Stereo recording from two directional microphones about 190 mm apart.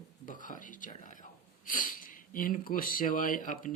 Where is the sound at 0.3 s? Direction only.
45° left (ahead or behind).